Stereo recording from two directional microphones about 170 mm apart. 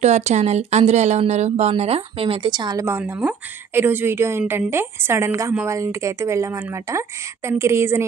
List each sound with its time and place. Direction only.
0.0 s speech: 40° right (ahead or behind); by 8.0 s 15° right (ahead or behind)